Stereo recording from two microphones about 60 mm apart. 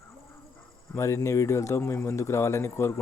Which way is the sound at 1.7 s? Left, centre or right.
Left.